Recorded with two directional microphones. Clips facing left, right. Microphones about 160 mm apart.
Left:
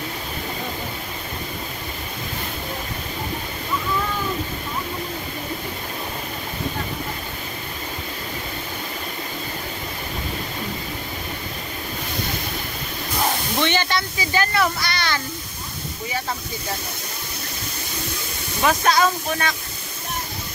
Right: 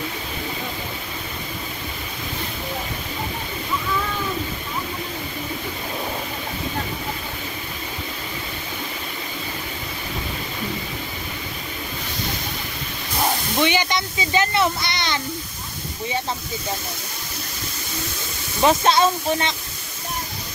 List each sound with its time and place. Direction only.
13.6 s speech: 10° right (ahead or behind)
18.6 s speech: 25° right (ahead or behind)